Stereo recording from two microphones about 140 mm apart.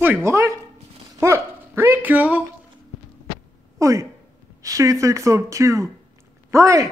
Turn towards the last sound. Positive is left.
turn(degrees=-20)  # may be behind; listen again after turning